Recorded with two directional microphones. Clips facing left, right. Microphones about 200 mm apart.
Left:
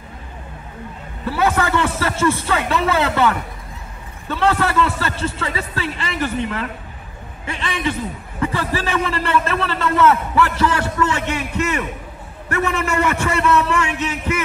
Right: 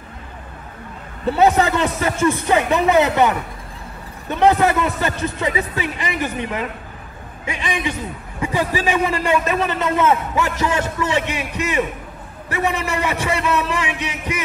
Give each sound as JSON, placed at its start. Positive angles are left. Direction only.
{"t": 1.4, "sound": "a man's voice", "side_deg": -15}